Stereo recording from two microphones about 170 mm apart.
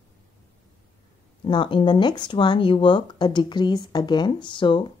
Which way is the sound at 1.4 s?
30° left (ahead or behind).